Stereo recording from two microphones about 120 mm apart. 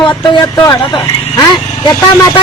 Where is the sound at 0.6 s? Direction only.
35° left (ahead or behind).